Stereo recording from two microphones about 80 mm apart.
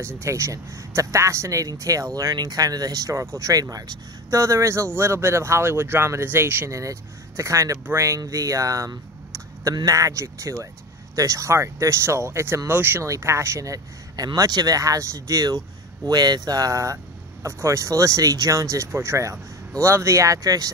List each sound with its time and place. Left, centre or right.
0.0 s speech: right
4.3 s speech: right
6.7 s speech: right